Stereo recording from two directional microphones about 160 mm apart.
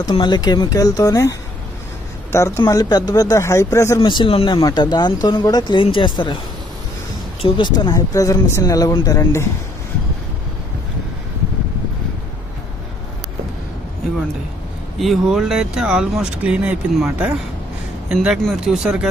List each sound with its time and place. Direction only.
0.0 s speech: 30° left (ahead or behind)
7.4 s speech: 30° left (ahead or behind)
14.9 s speech: centre (ahead or behind)